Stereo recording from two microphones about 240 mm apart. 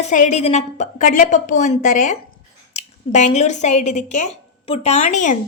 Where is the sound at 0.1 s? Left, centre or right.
Left.